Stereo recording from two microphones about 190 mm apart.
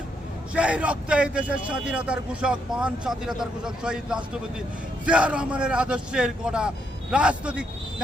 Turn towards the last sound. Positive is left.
turn(degrees=-5)  # may be behind; listen again after turning